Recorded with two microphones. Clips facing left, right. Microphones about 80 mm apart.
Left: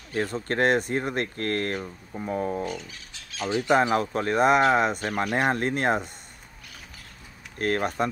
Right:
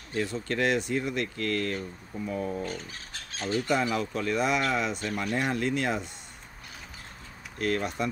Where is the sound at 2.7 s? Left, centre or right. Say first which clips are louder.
Left 3 dB; right.